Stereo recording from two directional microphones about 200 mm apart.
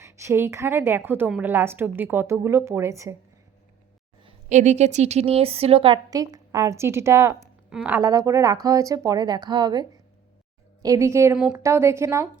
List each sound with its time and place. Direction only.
0.0 s a woman's voice: 15° right (ahead or behind)
4.2 s a woman's voice: 30° right (ahead or behind)
10.8 s a woman's voice: 15° right (ahead or behind)
11.3 s a woman's voice: 5° right (ahead or behind)